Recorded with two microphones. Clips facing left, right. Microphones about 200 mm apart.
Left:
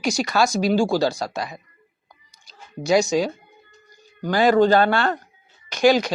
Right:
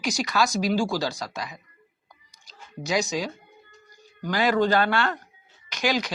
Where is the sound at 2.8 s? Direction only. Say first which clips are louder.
Left 8 dB; 30° left (ahead or behind).